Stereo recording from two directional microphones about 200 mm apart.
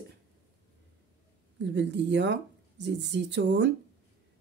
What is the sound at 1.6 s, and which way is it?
Speech, 60° right (ahead or behind).